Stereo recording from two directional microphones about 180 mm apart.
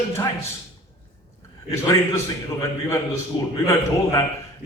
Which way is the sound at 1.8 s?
15° left (ahead or behind).